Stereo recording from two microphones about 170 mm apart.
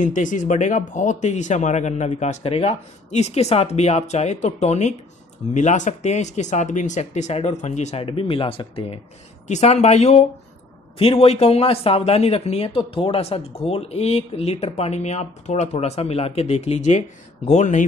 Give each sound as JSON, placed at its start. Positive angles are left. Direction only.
{"t": 0.0, "sound": "speech", "side_deg": 50}